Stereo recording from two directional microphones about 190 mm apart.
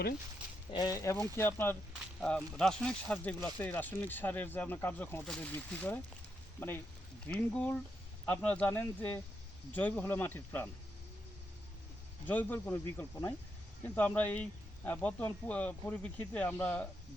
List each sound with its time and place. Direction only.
0.7 s speech: 20° left (ahead or behind)
12.2 s speech: 10° left (ahead or behind)